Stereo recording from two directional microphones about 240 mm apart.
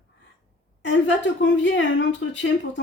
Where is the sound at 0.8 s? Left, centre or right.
Left.